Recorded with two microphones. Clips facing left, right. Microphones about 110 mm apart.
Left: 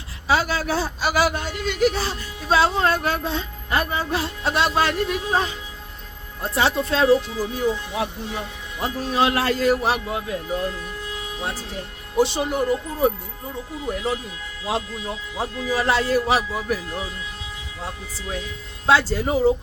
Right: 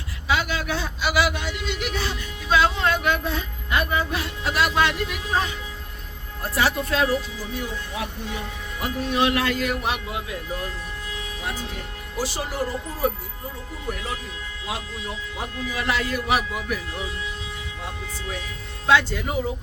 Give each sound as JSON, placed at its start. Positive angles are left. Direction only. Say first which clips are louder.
{"t": 0.3, "sound": "a man's voice", "louder": "left 3 dB", "side_deg": 35}
{"t": 8.8, "sound": "a man's voice", "louder": "left 2 dB", "side_deg": 35}
{"t": 12.1, "sound": "a man's voice", "louder": "left 7 dB", "side_deg": 25}
{"t": 18.9, "sound": "a man's voice", "louder": "left 2 dB", "side_deg": 35}